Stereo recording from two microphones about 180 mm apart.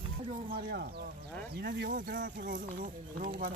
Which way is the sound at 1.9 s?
50° right (ahead or behind).